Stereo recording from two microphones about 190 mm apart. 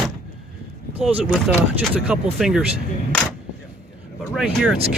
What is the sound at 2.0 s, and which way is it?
Speech, 5° right (ahead or behind).